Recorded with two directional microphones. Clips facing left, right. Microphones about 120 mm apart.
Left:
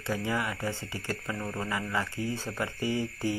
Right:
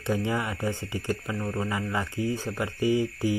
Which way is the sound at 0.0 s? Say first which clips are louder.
Right 3 dB; 20° right (ahead or behind).